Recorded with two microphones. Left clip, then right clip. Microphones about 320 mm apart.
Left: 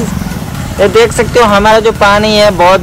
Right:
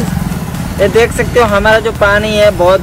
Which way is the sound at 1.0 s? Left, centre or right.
Left.